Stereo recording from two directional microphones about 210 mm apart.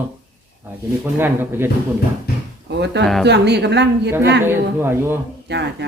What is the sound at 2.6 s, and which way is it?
Speech, 55° right (ahead or behind).